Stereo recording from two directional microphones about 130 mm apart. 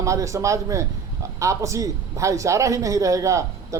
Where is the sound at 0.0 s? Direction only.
25° right (ahead or behind).